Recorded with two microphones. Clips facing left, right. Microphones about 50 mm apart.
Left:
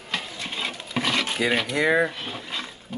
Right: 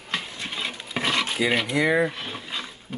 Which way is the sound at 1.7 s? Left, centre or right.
Left.